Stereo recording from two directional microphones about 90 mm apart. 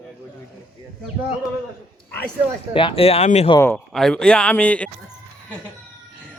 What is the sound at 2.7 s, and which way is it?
Speech, 75° left (ahead or behind).